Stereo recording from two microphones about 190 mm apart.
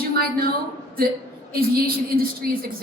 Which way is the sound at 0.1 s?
55° right (ahead or behind).